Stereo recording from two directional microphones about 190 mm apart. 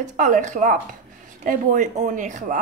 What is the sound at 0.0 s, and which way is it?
Speech, 40° right (ahead or behind).